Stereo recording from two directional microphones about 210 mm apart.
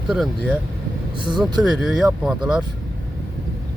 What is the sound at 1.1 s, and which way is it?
Speech, 25° right (ahead or behind).